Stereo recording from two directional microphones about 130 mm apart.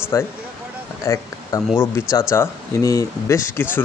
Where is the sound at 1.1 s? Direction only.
20° left (ahead or behind).